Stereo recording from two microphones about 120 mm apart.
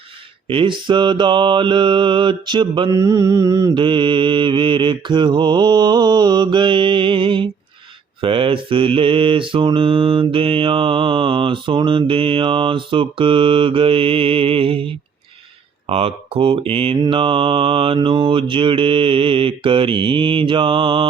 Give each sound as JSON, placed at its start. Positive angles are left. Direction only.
{"t": 0.4, "sound": "mantra", "side_deg": -45}
{"t": 2.9, "sound": "mantra", "side_deg": -25}
{"t": 3.8, "sound": "mantra", "side_deg": -45}
{"t": 15.9, "sound": "mantra", "side_deg": -50}